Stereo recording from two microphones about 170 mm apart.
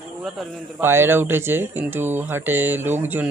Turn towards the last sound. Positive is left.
turn(degrees=-10)  # may be behind; listen again after turning